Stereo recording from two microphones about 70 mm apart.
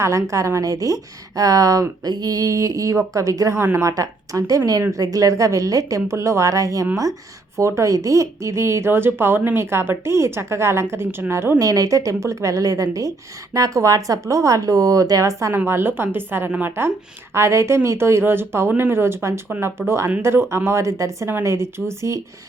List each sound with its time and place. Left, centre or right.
0.0 s a woman's voice: right
3.6 s speech: right
3.8 s a woman's voice: right
11.6 s a woman's voice: right
15.5 s a woman's voice: right
20.7 s a woman's voice: right